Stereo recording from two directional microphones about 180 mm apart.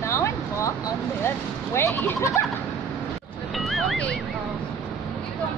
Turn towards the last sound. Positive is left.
turn(degrees=5)  # may be behind; listen again after turning